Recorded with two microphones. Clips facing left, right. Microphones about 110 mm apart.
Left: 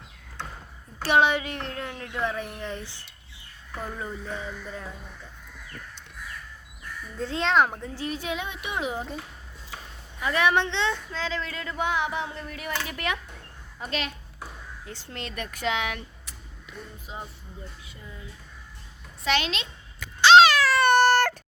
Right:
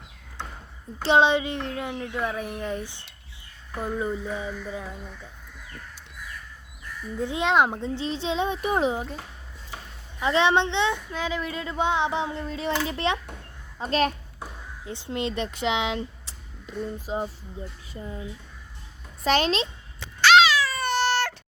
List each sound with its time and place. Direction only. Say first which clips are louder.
1.0 s speech: right 2 dB; 20° right (ahead or behind)
7.2 s a woman's voice: right 1 dB; 15° right (ahead or behind); by 8.9 s 35° right (ahead or behind)
10.2 s a woman's voice: right 2 dB; 25° right (ahead or behind)
14.8 s a woman's voice: right 10 dB; 20° right (ahead or behind)
16.6 s speech: right 11 dB; 35° right (ahead or behind)
19.2 s a child's voice: right 5 dB; 40° right (ahead or behind)
20.4 s a sound: left 3 dB; 55° left (ahead or behind)
20.7 s cat: left 6 dB; 65° left (ahead or behind); by 21.3 s 50° left (ahead or behind)